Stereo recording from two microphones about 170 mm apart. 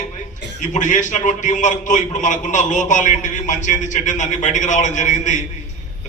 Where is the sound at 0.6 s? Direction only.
45° left (ahead or behind).